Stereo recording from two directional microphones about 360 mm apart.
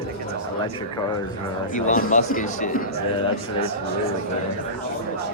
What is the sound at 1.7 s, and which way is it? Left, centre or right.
Speech, left.